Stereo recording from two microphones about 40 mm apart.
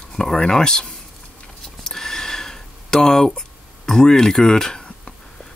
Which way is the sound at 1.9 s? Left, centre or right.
Centre.